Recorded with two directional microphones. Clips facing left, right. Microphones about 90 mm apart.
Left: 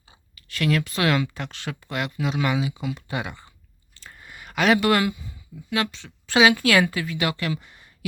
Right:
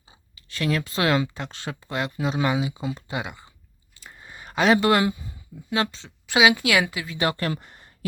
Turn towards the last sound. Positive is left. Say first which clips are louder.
# even
turn(degrees=-45)  # may be behind; listen again after turning